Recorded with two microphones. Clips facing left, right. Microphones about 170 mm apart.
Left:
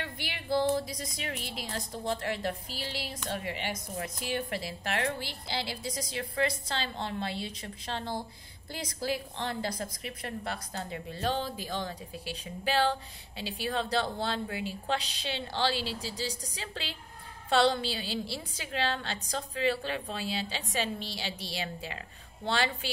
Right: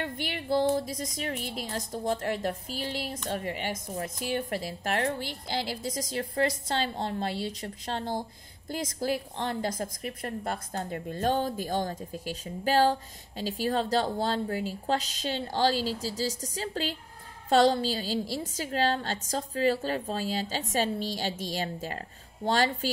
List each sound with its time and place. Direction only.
0.0 s a woman's voice: 45° right (ahead or behind)